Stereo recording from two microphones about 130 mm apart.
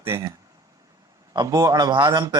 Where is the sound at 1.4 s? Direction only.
30° right (ahead or behind).